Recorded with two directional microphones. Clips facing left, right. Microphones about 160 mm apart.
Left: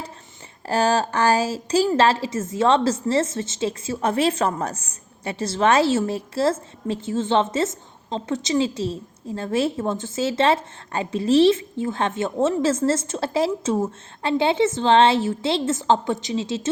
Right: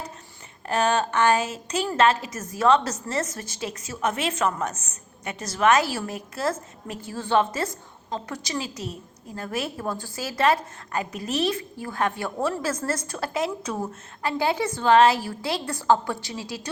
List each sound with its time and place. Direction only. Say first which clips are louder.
0.7 s a woman's voice: left 3 dB; 30° left (ahead or behind)